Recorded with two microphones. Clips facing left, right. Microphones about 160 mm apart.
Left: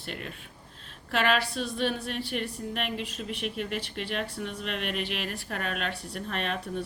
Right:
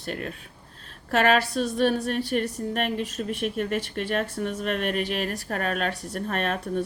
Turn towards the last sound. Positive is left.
turn(degrees=-45)  # may be behind; listen again after turning